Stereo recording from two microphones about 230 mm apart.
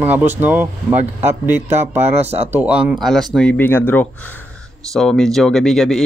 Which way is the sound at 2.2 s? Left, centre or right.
Right.